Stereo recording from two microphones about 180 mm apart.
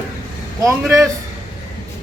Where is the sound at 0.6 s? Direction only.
15° right (ahead or behind).